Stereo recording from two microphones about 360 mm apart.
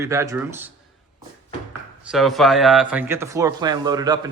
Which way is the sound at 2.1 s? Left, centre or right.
Centre.